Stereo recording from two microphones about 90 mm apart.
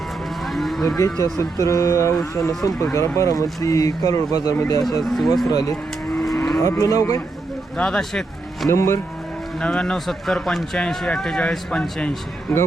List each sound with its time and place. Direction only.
0.4 s cattle: centre (ahead or behind)
0.9 s speech: 35° left (ahead or behind)
5.0 s speech: centre (ahead or behind)
5.5 s speech: 45° left (ahead or behind)
6.1 s livestock: 5° left (ahead or behind)
6.6 s speech: 35° left (ahead or behind)
7.8 s speech: 5° left (ahead or behind)
8.7 s speech: 30° left (ahead or behind)
9.6 s speech: 10° left (ahead or behind)